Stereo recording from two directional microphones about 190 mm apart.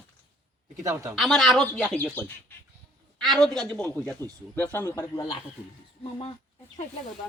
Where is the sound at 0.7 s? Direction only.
15° right (ahead or behind).